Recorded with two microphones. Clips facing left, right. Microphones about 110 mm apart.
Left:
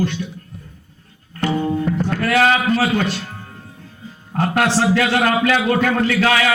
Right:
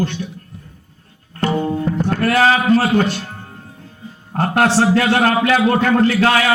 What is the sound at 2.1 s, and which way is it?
Speech, 45° right (ahead or behind).